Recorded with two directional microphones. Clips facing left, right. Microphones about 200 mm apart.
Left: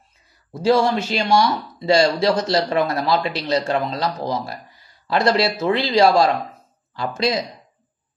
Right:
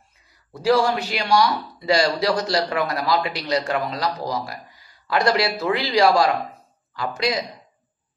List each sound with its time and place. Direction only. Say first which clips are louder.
0.5 s speech: left 2 dB; 25° left (ahead or behind)